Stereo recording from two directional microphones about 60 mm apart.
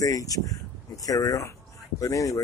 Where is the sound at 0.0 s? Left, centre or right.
Left.